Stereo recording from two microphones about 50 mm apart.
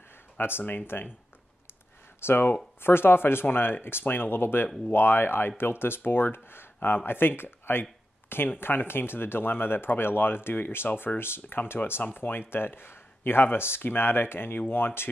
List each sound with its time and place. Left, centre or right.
0.4 s speech: left
2.2 s speech: left